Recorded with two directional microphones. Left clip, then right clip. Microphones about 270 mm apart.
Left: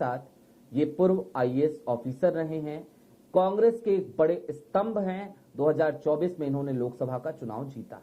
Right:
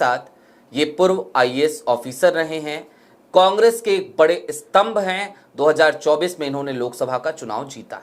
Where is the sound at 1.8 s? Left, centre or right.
Right.